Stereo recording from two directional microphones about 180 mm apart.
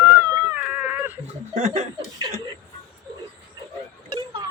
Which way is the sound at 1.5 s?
40° right (ahead or behind).